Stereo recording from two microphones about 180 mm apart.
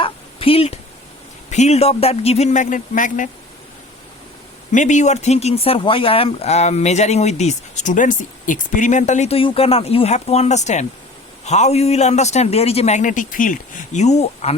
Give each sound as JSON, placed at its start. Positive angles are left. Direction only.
{"t": 0.0, "sound": "a sound", "side_deg": 30}
{"t": 1.5, "sound": "speech", "side_deg": 40}
{"t": 4.7, "sound": "speech", "side_deg": 45}